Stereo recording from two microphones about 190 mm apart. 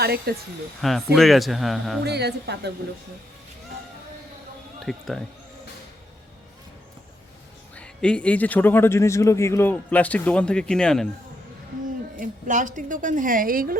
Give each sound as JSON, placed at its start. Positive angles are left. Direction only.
{"t": 0.0, "sound": "speech", "side_deg": -55}
{"t": 0.8, "sound": "speech", "side_deg": 0}
{"t": 2.0, "sound": "speech", "side_deg": -60}
{"t": 4.8, "sound": "speech", "side_deg": 0}
{"t": 7.8, "sound": "a man's voice", "side_deg": 5}
{"t": 12.1, "sound": "a woman's voice", "side_deg": -45}